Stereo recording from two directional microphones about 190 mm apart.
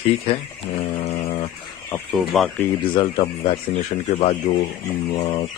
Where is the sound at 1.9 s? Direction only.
Centre (ahead or behind).